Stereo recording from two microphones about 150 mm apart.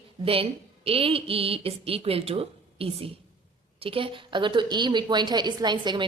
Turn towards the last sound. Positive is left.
turn(degrees=-30)  # may be behind; listen again after turning